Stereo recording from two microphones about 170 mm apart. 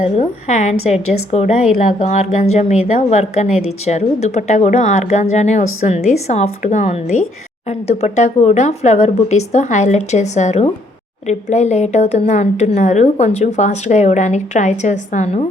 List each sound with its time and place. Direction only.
0.0 s a woman's voice: 40° left (ahead or behind)